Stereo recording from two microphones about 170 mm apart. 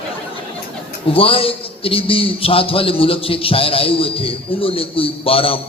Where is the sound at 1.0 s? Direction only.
30° left (ahead or behind).